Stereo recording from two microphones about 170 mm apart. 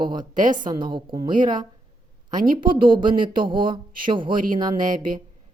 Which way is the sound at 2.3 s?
50° right (ahead or behind).